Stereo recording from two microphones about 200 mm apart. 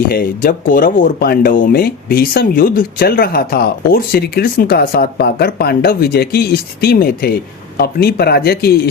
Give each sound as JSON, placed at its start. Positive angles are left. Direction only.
{"t": 0.1, "sound": "speech", "side_deg": 45}